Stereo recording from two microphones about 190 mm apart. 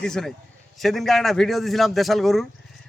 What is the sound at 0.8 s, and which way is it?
A man's voice, centre (ahead or behind).